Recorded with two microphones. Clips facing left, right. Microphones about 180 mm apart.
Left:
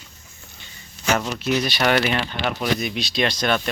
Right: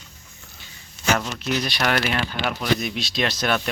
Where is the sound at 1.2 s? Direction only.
5° left (ahead or behind).